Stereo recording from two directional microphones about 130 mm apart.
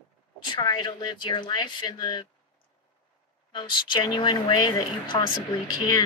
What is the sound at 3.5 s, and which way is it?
Speech, 35° left (ahead or behind).